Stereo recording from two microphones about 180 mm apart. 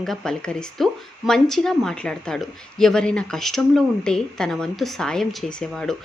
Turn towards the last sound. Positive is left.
turn(degrees=5)  # may be behind; listen again after turning